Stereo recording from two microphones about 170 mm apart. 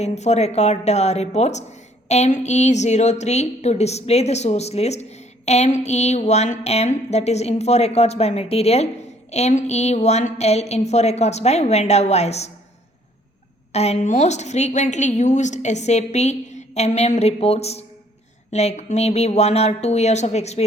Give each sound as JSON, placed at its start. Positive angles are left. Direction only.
{"t": 0.0, "sound": "speech", "side_deg": 40}
{"t": 13.7, "sound": "a woman's voice", "side_deg": 40}